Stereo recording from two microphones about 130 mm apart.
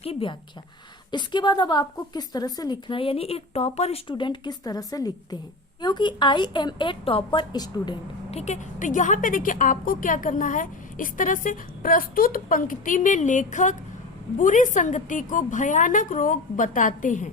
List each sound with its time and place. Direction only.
0.0 s a woman's voice: 45° left (ahead or behind)
1.1 s a woman's voice: 35° left (ahead or behind); by 4.0 s 55° left (ahead or behind)
4.1 s a woman's voice: 35° left (ahead or behind)
8.3 s a woman's voice: 55° left (ahead or behind); by 17.2 s 75° left (ahead or behind)